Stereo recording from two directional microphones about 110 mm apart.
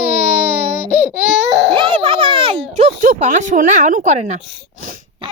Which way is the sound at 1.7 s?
55° right (ahead or behind).